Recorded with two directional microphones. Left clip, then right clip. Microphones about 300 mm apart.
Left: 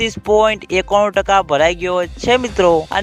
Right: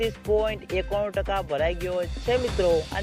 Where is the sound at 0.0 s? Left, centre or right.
Left.